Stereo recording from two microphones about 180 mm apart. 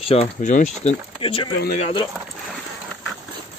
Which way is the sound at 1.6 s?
40° left (ahead or behind).